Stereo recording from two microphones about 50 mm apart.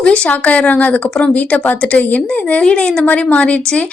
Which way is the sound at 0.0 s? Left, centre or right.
Left.